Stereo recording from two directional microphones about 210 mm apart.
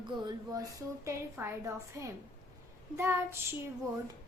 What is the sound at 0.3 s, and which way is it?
A woman's voice, 15° right (ahead or behind).